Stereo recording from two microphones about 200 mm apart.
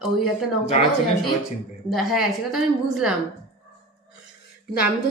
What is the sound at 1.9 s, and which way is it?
A woman's voice, centre (ahead or behind).